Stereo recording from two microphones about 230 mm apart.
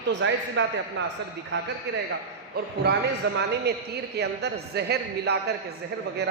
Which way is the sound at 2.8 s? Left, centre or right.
Right.